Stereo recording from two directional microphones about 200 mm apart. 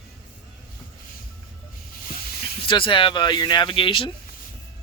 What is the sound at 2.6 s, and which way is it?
Speech, 25° left (ahead or behind).